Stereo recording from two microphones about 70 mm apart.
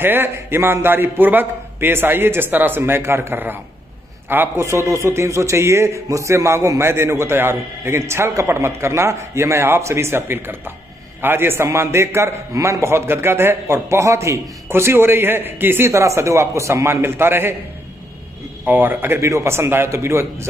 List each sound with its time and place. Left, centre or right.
0.0 s a man's voice: right
4.6 s a man's voice: right
14.7 s a man's voice: right
15.9 s a man's voice: right
18.7 s a man's voice: right
19.2 s a man's voice: right